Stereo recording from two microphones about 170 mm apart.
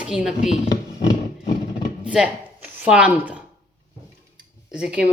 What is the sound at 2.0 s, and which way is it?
Speech, 5° right (ahead or behind).